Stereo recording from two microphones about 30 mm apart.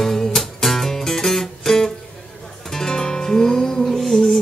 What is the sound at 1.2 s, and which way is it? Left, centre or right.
Music, centre.